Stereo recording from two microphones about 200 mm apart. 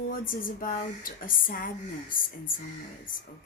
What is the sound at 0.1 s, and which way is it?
Speech, 45° left (ahead or behind).